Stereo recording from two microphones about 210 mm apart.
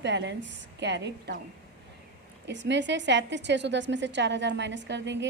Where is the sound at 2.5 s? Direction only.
55° right (ahead or behind).